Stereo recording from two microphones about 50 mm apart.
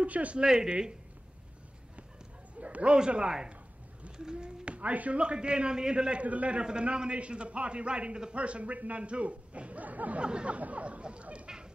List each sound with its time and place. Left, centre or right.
0.0 s speech: right
0.4 s speech: centre
2.6 s a man's voice: right
10.2 s a man's voice: right